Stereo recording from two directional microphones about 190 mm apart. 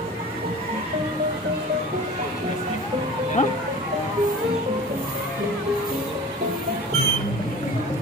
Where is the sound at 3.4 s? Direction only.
40° left (ahead or behind).